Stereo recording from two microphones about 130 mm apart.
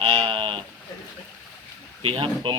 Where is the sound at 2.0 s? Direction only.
45° right (ahead or behind).